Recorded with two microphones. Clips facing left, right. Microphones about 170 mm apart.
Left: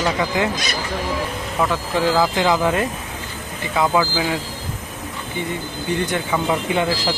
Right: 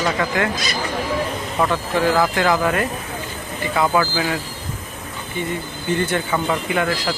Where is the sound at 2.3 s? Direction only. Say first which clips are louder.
Even; 20° left (ahead or behind).